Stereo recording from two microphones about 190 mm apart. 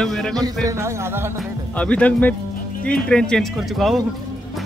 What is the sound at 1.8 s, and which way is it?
Speech, 5° left (ahead or behind).